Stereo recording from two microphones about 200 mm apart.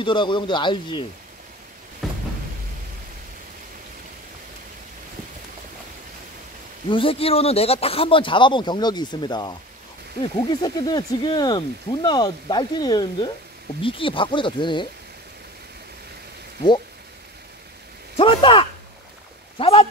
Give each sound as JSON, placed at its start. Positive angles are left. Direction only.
{"t": 0.0, "sound": "speech", "side_deg": 25}
{"t": 2.0, "sound": "a sound", "side_deg": 0}
{"t": 6.9, "sound": "speech", "side_deg": 25}
{"t": 18.1, "sound": "speech", "side_deg": 25}